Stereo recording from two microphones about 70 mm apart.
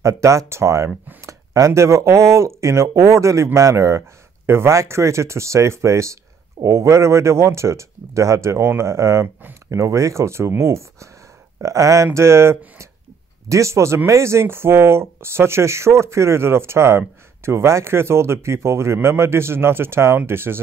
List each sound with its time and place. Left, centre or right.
0.0 s speech: right